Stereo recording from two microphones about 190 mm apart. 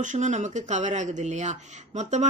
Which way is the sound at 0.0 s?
40° right (ahead or behind).